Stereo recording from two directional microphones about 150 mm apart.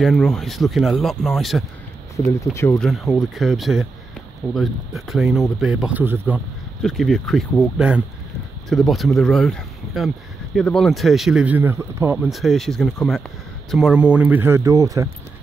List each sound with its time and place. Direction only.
0.0 s speech: 5° left (ahead or behind)
2.4 s speech: 20° left (ahead or behind)
2.8 s speech: centre (ahead or behind)
6.8 s speech: 5° left (ahead or behind); by 12.3 s 15° right (ahead or behind)
12.3 s speech: centre (ahead or behind); by 15.0 s 20° right (ahead or behind)